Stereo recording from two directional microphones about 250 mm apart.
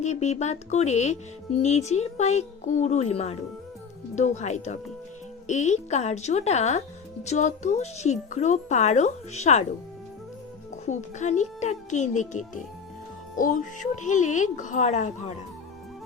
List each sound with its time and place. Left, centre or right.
0.0 s speech: left
10.8 s speech: left